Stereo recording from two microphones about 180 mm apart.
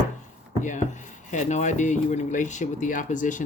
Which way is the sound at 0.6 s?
45° left (ahead or behind).